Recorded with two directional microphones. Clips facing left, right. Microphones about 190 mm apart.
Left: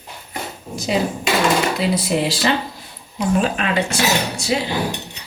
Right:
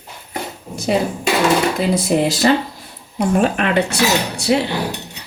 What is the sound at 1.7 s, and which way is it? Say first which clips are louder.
Speech: right 3 dB; 45° right (ahead or behind).